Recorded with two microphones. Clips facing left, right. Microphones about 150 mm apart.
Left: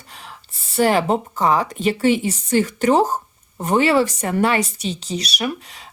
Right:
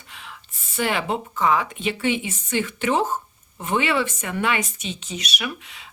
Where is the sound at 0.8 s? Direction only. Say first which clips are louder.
Left 7 dB; 40° left (ahead or behind).